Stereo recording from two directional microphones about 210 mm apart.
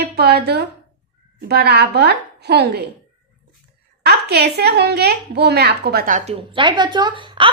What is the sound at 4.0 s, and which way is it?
A woman's voice, 50° right (ahead or behind).